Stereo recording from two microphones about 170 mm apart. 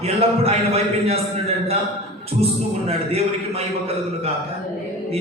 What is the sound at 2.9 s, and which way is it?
Speech, 35° right (ahead or behind).